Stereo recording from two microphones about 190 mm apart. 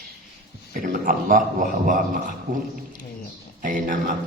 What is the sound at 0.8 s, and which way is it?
A man's voice, 45° right (ahead or behind).